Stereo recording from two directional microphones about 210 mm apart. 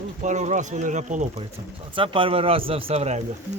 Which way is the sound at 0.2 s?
35° right (ahead or behind).